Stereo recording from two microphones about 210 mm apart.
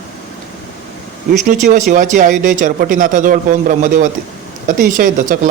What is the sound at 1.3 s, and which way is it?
Speech, 35° right (ahead or behind).